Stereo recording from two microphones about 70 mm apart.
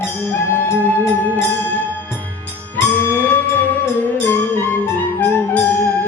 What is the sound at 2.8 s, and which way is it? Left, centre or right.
Music, left.